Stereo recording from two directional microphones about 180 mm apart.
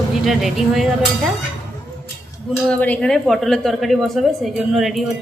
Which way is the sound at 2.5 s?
5° left (ahead or behind).